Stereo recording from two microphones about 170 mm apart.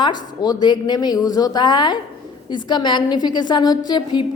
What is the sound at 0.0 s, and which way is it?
A woman's voice, 25° left (ahead or behind).